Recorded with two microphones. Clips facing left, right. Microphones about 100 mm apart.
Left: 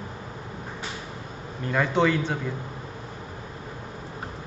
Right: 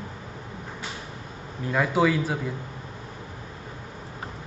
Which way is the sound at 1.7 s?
5° right (ahead or behind).